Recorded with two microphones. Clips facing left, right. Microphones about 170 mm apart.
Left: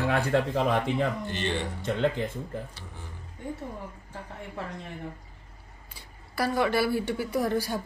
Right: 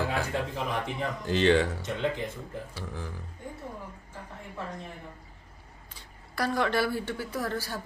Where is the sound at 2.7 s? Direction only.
90° right.